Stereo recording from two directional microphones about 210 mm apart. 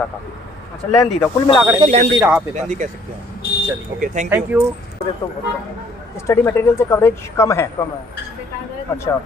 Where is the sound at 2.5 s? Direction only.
35° right (ahead or behind).